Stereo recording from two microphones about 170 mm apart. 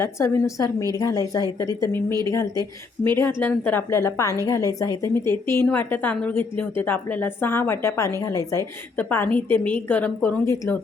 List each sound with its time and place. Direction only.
0.0 s a woman's voice: 15° left (ahead or behind)